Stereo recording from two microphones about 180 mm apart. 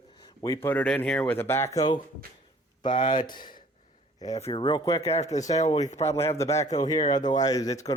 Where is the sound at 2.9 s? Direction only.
45° left (ahead or behind).